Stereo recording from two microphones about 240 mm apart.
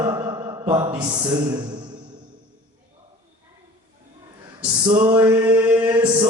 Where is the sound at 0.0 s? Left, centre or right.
Centre.